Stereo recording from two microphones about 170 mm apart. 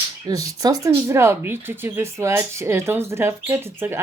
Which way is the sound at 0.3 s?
20° right (ahead or behind).